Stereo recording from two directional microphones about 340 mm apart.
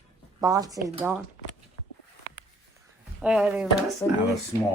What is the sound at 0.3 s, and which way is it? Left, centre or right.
Speech, centre.